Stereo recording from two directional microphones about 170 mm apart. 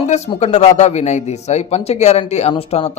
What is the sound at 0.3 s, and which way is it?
Speech, 40° left (ahead or behind).